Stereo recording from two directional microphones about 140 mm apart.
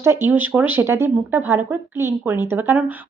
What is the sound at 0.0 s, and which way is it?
Speech, 15° right (ahead or behind).